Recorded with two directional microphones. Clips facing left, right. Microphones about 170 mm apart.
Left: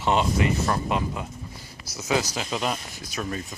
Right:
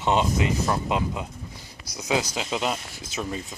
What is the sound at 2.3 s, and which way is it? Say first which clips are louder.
Speech: right 1 dB; 5° right (ahead or behind).